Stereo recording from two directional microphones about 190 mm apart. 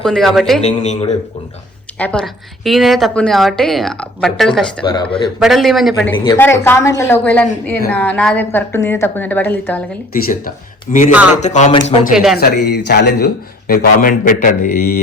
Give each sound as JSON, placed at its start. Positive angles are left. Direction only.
{"t": 0.0, "sound": "a woman's voice", "side_deg": 0}
{"t": 0.6, "sound": "speech", "side_deg": 35}
{"t": 2.0, "sound": "a woman's voice", "side_deg": 5}
{"t": 4.8, "sound": "speech", "side_deg": 25}
{"t": 5.4, "sound": "a woman's voice", "side_deg": 0}
{"t": 6.1, "sound": "a woman's voice", "side_deg": 25}
{"t": 11.3, "sound": "speech", "side_deg": 40}
{"t": 12.1, "sound": "a woman's voice", "side_deg": 0}
{"t": 12.4, "sound": "speech", "side_deg": 60}